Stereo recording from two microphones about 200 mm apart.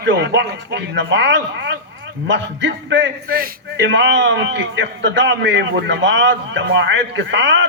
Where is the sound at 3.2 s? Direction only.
45° right (ahead or behind); by 7.7 s 65° right (ahead or behind).